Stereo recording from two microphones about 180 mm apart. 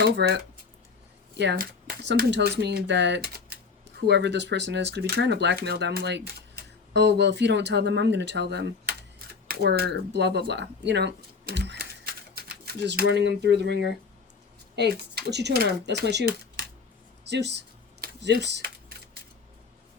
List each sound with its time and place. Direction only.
0.0 s speech: 70° right (ahead or behind)
1.5 s speech: 60° right (ahead or behind)
12.3 s speech: 55° right (ahead or behind)
18.0 s a sound: 70° right (ahead or behind)